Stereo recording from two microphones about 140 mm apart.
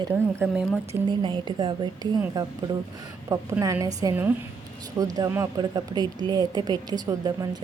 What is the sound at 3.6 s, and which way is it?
A woman's voice, 25° right (ahead or behind).